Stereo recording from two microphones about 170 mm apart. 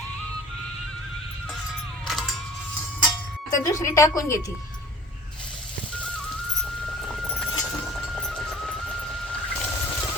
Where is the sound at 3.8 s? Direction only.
20° left (ahead or behind).